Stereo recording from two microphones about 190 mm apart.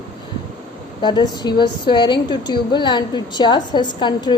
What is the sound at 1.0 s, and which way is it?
Speech, 20° left (ahead or behind).